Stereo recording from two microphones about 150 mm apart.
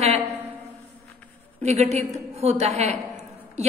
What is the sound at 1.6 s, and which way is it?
A woman's voice, 45° right (ahead or behind).